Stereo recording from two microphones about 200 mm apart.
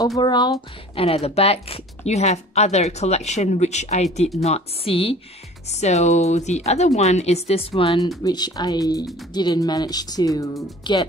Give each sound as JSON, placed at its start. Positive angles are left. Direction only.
{"t": 0.2, "sound": "speech", "side_deg": 20}